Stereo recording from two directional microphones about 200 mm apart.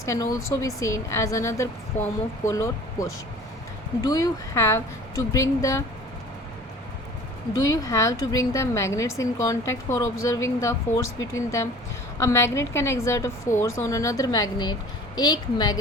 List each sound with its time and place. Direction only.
0.0 s a woman's voice: 15° left (ahead or behind)
7.5 s a woman's voice: 20° left (ahead or behind)